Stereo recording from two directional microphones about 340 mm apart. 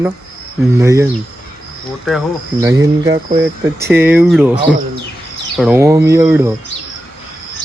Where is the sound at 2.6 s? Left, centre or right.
Centre.